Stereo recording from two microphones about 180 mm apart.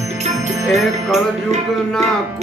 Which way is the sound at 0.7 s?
Centre (ahead or behind).